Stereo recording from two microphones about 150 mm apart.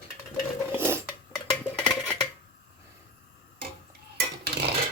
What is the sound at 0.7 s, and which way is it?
Dishes, 15° right (ahead or behind).